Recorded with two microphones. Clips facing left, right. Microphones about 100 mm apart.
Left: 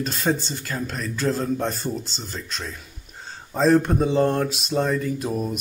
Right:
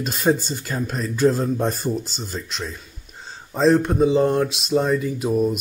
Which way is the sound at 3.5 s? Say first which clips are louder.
Right 1 dB; centre (ahead or behind).